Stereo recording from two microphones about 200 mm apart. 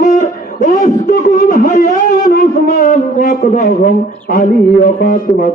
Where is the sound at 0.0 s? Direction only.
35° left (ahead or behind).